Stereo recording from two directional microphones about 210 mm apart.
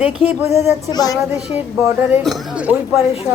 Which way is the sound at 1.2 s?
5° right (ahead or behind).